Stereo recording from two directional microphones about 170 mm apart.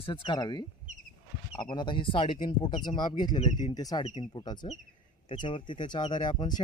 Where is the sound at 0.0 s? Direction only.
30° left (ahead or behind).